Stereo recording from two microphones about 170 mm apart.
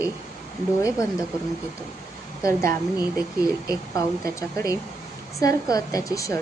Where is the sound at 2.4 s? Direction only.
20° left (ahead or behind).